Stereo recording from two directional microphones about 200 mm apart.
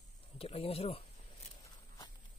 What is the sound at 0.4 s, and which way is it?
Speech, 30° left (ahead or behind).